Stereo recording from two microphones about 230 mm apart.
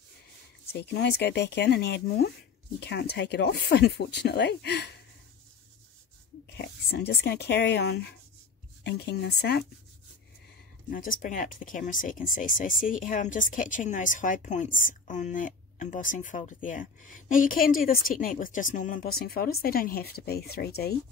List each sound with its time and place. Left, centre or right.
0.7 s speech: left
6.5 s speech: left
10.9 s a woman's voice: left